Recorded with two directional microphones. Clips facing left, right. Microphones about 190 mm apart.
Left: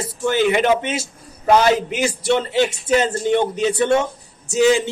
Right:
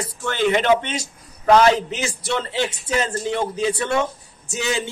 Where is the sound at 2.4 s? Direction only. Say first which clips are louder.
Left 5 dB; 25° left (ahead or behind).